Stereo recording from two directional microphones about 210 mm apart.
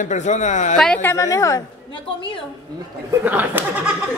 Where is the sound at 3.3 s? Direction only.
10° right (ahead or behind).